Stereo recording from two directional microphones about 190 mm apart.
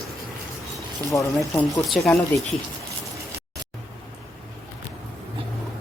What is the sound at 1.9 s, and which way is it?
Speech, centre (ahead or behind).